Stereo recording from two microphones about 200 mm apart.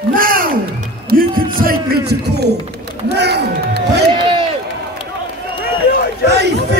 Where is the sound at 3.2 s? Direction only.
55° right (ahead or behind).